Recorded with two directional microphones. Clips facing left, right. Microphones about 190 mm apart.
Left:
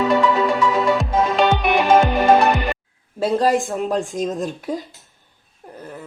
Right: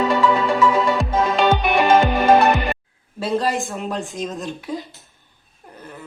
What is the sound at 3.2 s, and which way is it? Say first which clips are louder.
Speech: left 4 dB; 45° left (ahead or behind).